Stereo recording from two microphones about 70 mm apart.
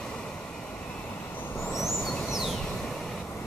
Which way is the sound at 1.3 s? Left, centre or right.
Left.